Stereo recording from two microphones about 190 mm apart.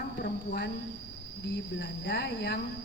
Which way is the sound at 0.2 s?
60° left (ahead or behind).